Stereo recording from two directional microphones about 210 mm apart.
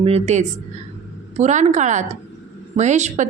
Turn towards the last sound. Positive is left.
turn(degrees=-35)  # may be behind; listen again after turning